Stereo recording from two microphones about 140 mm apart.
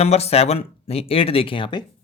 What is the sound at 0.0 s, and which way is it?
Speech, 45° left (ahead or behind).